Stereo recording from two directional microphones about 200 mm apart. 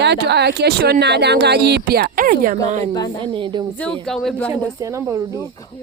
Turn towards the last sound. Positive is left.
turn(degrees=-15)  # may be behind; listen again after turning